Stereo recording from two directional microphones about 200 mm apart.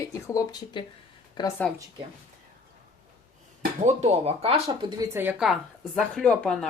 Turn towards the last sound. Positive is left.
turn(degrees=5)  # may be behind; listen again after turning